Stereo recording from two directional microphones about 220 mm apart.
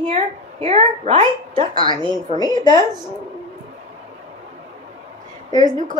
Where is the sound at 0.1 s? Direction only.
30° right (ahead or behind).